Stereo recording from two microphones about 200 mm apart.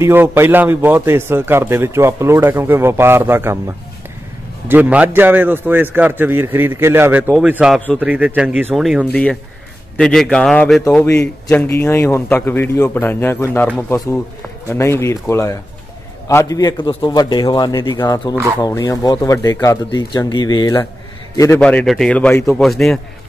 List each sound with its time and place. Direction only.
0.0 s a man's voice: 10° right (ahead or behind)
4.6 s a man's voice: 10° right (ahead or behind); by 20.8 s 20° left (ahead or behind)
21.5 s speech: 5° left (ahead or behind)